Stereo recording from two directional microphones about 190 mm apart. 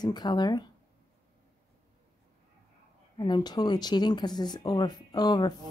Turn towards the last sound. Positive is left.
turn(degrees=20)  # may be behind; listen again after turning